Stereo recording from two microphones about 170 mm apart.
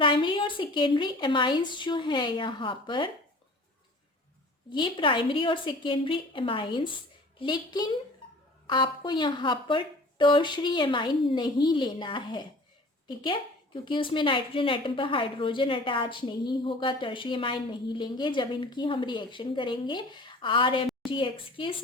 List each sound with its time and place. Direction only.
0.0 s a woman's voice: 30° left (ahead or behind)
4.7 s a woman's voice: 30° left (ahead or behind)
13.8 s a woman's voice: 30° left (ahead or behind)